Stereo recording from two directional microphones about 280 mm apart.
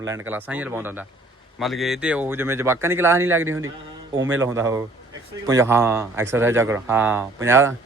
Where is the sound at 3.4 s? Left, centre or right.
Right.